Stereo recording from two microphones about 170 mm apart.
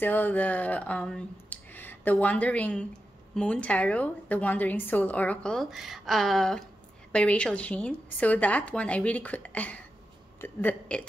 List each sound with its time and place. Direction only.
0.0 s a woman's voice: 10° left (ahead or behind)